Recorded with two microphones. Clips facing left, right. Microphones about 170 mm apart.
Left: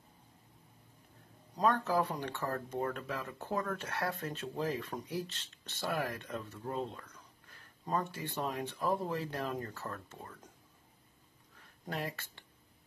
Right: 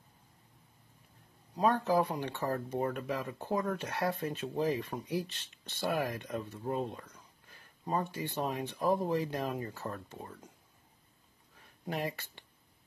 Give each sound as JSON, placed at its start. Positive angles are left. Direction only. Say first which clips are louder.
{"t": 1.6, "sound": "speech", "louder": "right 2 dB", "side_deg": -15}
{"t": 11.8, "sound": "speech", "louder": "right 3 dB", "side_deg": -15}